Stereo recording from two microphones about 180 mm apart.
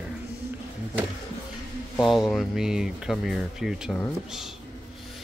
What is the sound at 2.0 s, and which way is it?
Speech, centre (ahead or behind).